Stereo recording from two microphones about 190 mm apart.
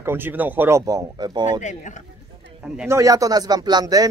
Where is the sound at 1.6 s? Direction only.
40° left (ahead or behind).